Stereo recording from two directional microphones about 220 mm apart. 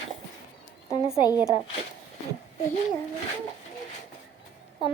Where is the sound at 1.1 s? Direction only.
15° left (ahead or behind).